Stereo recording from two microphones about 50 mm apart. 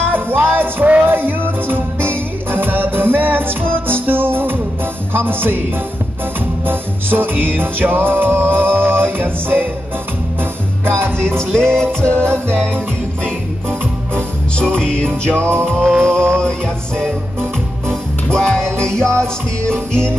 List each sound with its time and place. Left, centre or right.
0.0 s music: right
6.6 s music: right
11.1 s music: centre
14.1 s music: centre
15.3 s music: right
16.0 s music: centre
18.3 s music: centre